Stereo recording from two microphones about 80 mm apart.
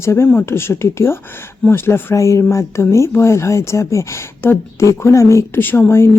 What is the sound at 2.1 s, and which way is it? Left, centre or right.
Speech, left.